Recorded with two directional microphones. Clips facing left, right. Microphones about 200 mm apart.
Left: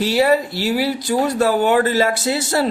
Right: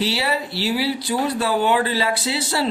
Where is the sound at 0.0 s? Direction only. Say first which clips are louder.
Left 7 dB; 45° left (ahead or behind).